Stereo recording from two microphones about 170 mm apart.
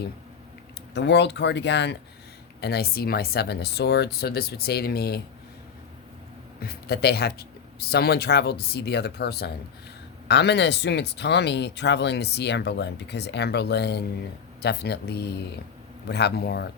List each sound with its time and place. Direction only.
0.9 s speech: 90° left
2.6 s speech: 70° left (ahead or behind)
6.6 s speech: 65° left (ahead or behind)
10.2 s speech: 85° left